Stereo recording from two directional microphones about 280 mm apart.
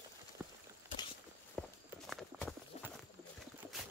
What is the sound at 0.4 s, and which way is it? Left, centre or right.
Horse, centre.